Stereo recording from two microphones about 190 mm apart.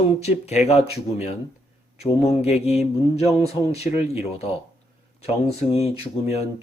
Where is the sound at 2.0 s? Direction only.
35° left (ahead or behind).